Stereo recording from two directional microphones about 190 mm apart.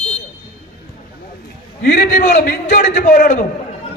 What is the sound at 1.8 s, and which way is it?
A man's voice, 50° left (ahead or behind).